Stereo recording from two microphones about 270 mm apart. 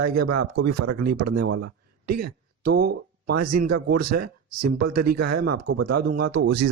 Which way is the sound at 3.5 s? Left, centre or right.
Right.